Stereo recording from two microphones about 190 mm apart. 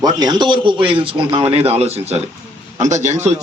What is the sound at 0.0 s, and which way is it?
A man's voice, 20° right (ahead or behind).